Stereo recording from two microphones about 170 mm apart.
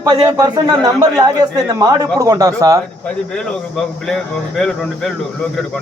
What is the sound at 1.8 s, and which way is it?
A man's voice, 20° right (ahead or behind).